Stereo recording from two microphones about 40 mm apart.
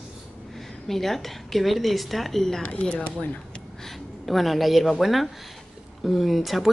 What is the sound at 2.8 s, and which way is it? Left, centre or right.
Speech, left.